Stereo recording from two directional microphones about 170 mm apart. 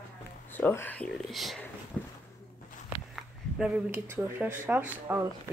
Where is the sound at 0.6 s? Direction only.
10° left (ahead or behind).